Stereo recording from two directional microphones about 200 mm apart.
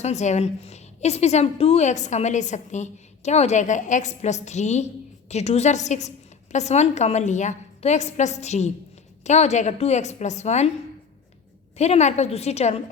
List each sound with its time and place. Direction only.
0.0 s a woman's voice: 35° left (ahead or behind)
11.8 s a woman's voice: 35° left (ahead or behind)